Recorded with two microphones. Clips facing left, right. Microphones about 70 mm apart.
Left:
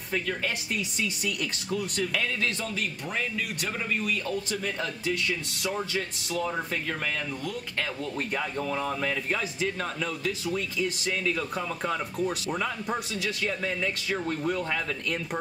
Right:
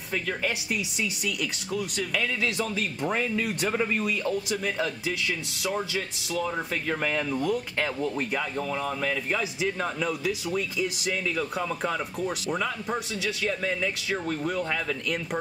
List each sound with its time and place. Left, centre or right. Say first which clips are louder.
0.3 s a man's voice: right 2 dB; centre
3.1 s speech: right 6 dB; right
4.1 s a man's voice: right 2 dB; centre
6.9 s speech: right 4 dB; centre
8.4 s a man's voice: even; centre
9.4 s a man's voice: right 2 dB; centre